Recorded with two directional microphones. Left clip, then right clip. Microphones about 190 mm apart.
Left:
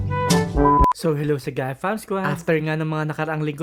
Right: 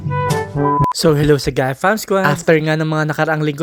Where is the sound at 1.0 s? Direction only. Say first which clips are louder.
Right 9 dB; 40° right (ahead or behind).